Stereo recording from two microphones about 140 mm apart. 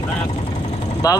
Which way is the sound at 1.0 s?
25° left (ahead or behind).